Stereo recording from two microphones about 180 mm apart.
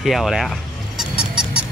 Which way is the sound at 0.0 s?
Centre (ahead or behind).